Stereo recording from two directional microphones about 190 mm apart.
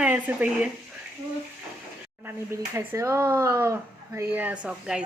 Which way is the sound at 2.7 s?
15° right (ahead or behind).